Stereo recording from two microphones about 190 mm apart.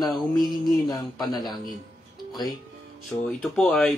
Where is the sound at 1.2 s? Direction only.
20° left (ahead or behind).